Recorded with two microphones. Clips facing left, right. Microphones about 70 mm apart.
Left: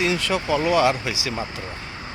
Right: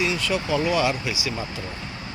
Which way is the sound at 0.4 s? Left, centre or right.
Left.